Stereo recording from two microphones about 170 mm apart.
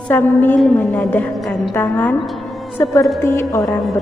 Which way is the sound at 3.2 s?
15° left (ahead or behind).